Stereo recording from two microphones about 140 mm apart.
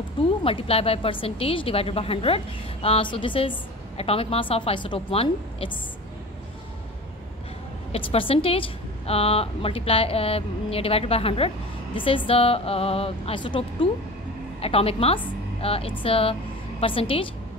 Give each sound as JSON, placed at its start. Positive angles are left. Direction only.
{"t": 0.4, "sound": "a woman's voice", "side_deg": 40}
{"t": 7.9, "sound": "a woman's voice", "side_deg": 40}